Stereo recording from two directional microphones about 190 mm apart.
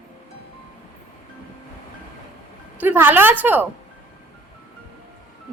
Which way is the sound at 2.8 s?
10° right (ahead or behind).